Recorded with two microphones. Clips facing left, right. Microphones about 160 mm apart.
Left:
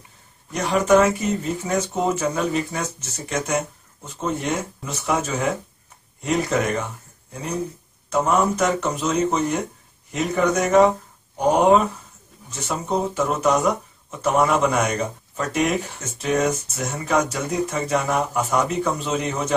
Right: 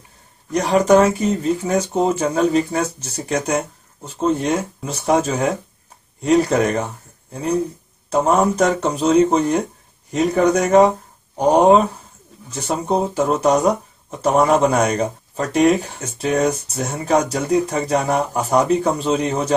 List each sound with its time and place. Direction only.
0.5 s speech: 40° right (ahead or behind)
8.1 s speech: 35° right (ahead or behind)